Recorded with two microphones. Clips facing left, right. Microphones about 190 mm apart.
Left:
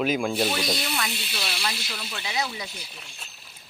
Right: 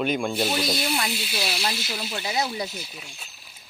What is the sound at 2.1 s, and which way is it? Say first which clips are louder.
Speech: right 3 dB; 40° right (ahead or behind).